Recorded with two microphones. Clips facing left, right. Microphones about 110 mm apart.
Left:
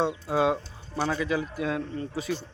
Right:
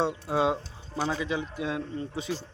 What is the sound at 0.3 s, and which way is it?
A man's voice, 25° right (ahead or behind).